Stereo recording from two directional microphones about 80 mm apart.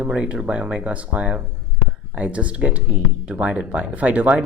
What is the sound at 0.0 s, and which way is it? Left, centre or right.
Speech, centre.